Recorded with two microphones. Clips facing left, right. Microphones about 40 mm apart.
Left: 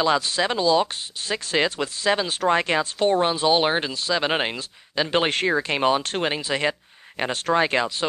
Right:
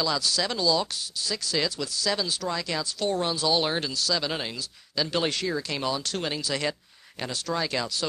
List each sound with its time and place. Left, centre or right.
0.0 s speech: left